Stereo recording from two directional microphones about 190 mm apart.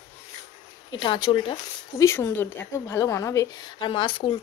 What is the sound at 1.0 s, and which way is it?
Speech, 25° left (ahead or behind).